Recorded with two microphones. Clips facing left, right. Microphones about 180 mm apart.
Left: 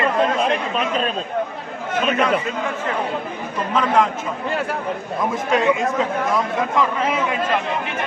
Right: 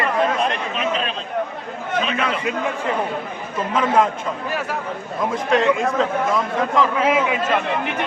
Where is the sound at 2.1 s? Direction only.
45° left (ahead or behind).